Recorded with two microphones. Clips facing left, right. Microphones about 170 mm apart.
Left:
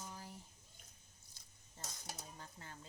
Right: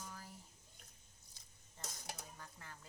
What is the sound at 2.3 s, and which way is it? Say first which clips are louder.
Mechanisms: left 1 dB; 30° left (ahead or behind).